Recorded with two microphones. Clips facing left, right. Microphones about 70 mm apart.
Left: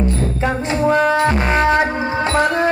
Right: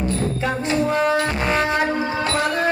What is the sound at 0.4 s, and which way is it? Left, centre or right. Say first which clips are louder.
Music: left 5 dB; left.